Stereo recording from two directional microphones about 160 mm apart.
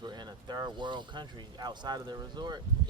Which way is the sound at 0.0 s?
25° right (ahead or behind).